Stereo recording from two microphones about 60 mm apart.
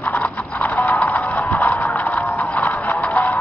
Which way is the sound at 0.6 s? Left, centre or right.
Left.